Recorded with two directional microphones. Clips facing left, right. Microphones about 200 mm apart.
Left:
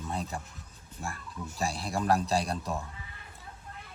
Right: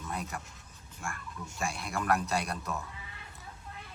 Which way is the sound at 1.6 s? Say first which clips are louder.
Left 3 dB; 35° left (ahead or behind).